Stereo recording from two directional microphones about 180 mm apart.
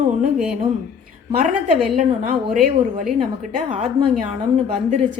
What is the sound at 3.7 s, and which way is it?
Speech, 40° right (ahead or behind).